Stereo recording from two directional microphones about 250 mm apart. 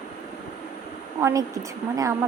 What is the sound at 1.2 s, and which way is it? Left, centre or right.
Speech, centre.